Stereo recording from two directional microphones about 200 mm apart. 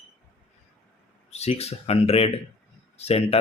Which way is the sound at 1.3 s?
30° left (ahead or behind).